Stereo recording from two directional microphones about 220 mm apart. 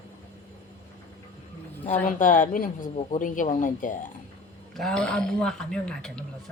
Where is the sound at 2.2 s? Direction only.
35° left (ahead or behind).